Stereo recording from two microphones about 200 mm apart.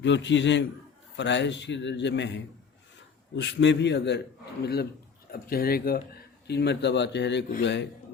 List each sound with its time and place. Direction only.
0.0 s speech: 65° left (ahead or behind)